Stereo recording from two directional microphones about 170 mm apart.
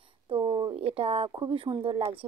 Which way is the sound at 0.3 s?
25° right (ahead or behind).